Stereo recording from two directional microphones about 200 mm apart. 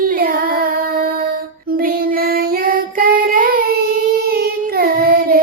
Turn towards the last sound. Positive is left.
turn(degrees=-45)  # may be behind; listen again after turning